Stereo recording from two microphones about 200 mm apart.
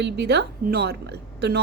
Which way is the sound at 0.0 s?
55° right (ahead or behind).